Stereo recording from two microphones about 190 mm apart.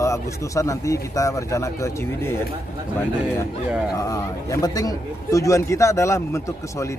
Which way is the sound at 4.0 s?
15° left (ahead or behind).